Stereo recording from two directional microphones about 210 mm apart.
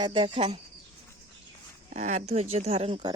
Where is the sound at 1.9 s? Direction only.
35° right (ahead or behind).